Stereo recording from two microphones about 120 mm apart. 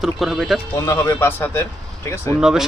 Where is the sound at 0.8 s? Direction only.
25° left (ahead or behind).